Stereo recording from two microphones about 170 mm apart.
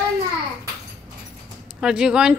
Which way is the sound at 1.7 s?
5° right (ahead or behind).